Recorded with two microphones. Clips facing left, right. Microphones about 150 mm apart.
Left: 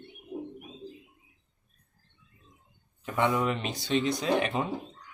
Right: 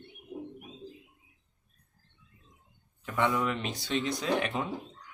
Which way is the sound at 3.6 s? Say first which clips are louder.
Left 4 dB; centre (ahead or behind).